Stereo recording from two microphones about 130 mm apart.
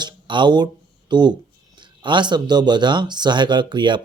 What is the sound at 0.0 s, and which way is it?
A man's voice, 35° right (ahead or behind).